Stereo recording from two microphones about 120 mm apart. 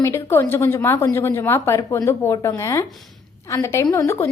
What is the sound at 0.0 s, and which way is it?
A woman's voice, 25° left (ahead or behind).